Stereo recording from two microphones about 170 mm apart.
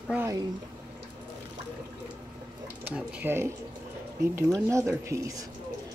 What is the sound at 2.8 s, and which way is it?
Speech, 10° right (ahead or behind).